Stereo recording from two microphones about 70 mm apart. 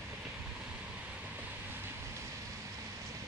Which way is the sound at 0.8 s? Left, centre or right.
Centre.